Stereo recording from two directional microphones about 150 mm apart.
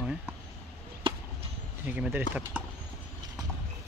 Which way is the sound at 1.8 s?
10° right (ahead or behind).